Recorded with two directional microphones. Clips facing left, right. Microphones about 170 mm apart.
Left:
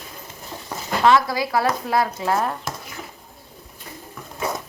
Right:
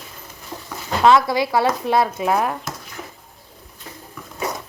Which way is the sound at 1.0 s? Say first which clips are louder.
Right 3 dB; 25° right (ahead or behind).